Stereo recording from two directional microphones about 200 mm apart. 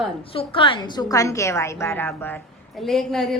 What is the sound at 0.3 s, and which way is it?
A woman's voice, 25° left (ahead or behind).